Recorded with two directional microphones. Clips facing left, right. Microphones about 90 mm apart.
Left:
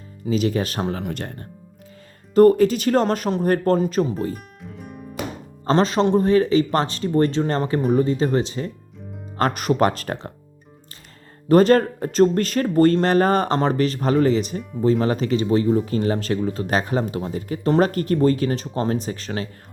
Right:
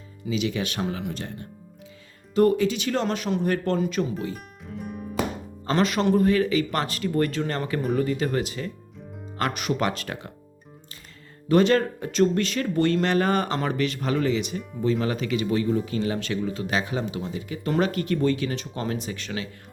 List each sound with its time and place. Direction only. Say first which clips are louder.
0.3 s speech: left 5 dB; 40° left (ahead or behind)
1.1 s speech: left 3 dB; 60° left (ahead or behind)
2.3 s speech: left 7 dB; 45° left (ahead or behind)
4.6 s guitar: right 2 dB; centre (ahead or behind)
5.6 s speech: left 4 dB; 30° left (ahead or behind)
9.4 s speech: left 6 dB; 40° left (ahead or behind)
11.4 s speech: left 5 dB; 40° left (ahead or behind)